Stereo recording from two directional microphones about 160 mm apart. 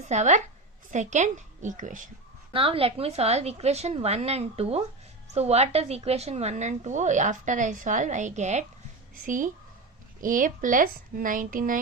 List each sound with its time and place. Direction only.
0.1 s a woman's voice: 45° right (ahead or behind)
2.5 s a woman's voice: 35° right (ahead or behind); by 11.8 s 55° right (ahead or behind)